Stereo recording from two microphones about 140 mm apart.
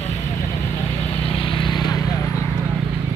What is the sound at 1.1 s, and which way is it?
Vehicle, 40° left (ahead or behind).